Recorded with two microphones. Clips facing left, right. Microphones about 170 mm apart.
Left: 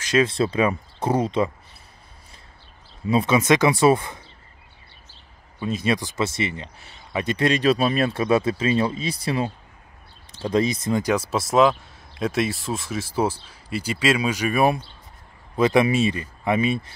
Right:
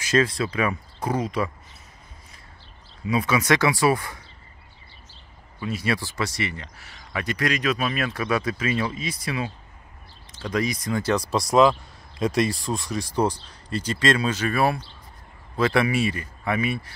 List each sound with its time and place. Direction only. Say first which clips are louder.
0.2 s speech: left 3 dB; 25° left (ahead or behind)
3.1 s speech: left 3 dB; 25° left (ahead or behind)
5.6 s speech: left 3 dB; 20° left (ahead or behind)
11.1 s speech: right 2 dB; 5° left (ahead or behind); by 16.9 s 20° left (ahead or behind)